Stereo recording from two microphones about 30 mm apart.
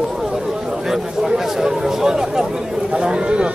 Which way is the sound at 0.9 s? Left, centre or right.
Centre.